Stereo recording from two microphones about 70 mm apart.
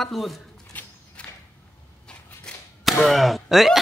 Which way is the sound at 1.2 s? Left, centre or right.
Centre.